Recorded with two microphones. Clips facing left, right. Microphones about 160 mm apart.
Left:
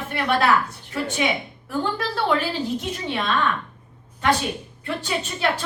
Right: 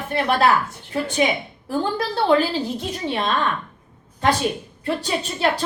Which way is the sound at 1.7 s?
35° right (ahead or behind).